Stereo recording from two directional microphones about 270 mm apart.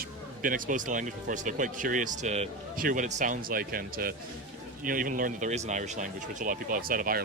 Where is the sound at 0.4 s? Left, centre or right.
Right.